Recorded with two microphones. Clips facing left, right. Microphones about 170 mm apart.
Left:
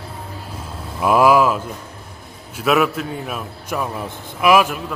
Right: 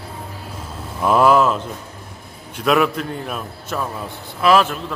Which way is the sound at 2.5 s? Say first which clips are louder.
Even; 5° left (ahead or behind).